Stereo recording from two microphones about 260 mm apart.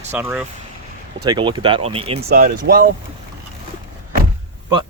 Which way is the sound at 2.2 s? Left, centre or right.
Right.